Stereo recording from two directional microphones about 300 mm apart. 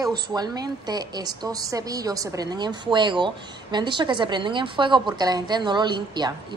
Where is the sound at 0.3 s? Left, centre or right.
Centre.